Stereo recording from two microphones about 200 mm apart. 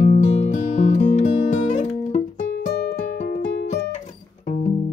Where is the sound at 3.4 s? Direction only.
40° left (ahead or behind).